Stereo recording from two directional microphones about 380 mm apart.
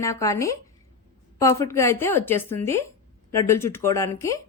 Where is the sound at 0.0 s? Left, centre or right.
Centre.